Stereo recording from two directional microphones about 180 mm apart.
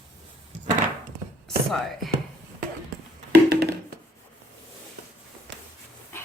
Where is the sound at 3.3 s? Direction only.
65° right (ahead or behind).